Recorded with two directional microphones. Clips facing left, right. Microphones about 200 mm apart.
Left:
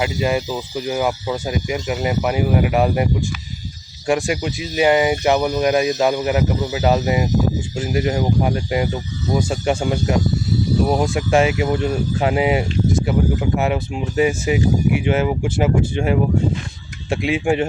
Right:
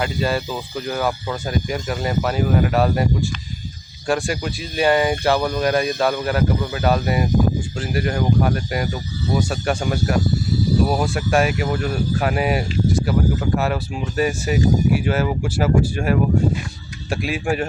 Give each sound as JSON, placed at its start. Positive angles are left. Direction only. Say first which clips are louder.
{"t": 0.0, "sound": "speech", "louder": "left 2 dB", "side_deg": 15}